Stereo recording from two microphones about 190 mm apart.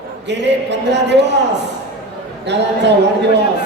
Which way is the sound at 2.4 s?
65° right (ahead or behind).